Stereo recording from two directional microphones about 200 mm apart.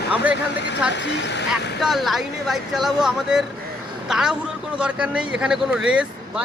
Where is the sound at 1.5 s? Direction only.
Centre (ahead or behind).